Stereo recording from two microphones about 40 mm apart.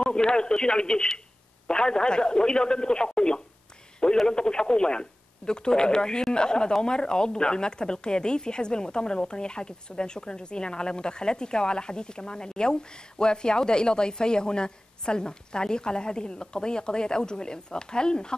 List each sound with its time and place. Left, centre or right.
0.0 s speech: left